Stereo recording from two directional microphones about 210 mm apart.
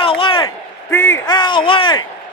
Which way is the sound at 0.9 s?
10° left (ahead or behind).